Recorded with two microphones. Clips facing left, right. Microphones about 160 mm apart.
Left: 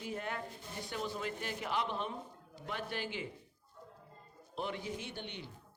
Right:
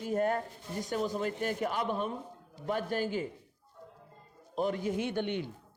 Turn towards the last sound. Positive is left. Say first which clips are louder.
# right 12 dB
turn(degrees=-55)  # may be behind; listen again after turning